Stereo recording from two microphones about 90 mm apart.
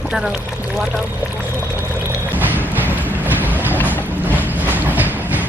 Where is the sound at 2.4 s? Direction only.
20° right (ahead or behind).